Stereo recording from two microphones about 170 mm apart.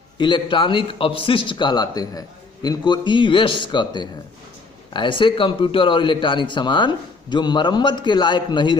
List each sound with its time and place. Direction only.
0.2 s a man's voice: 30° left (ahead or behind)